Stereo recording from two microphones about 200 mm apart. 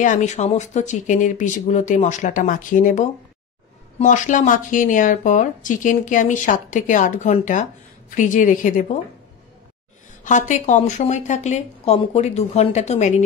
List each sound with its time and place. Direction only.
0.0 s speech: 35° left (ahead or behind)
10.2 s speech: 40° left (ahead or behind)